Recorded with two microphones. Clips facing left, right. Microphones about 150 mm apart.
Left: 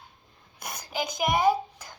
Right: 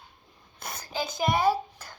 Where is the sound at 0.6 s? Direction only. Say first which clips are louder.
Left 1 dB; 15° left (ahead or behind).